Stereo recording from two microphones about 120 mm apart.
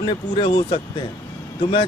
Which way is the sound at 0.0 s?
45° left (ahead or behind).